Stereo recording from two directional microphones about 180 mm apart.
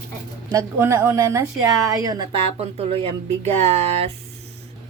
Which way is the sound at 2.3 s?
35° right (ahead or behind).